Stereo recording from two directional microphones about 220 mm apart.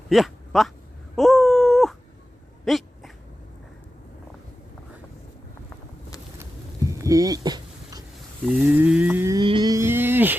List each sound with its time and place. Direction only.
0.1 s speech: centre (ahead or behind)
1.1 s wail: centre (ahead or behind)
2.6 s dog: centre (ahead or behind)
7.0 s a sound: 15° right (ahead or behind)
8.5 s livestock: 5° right (ahead or behind)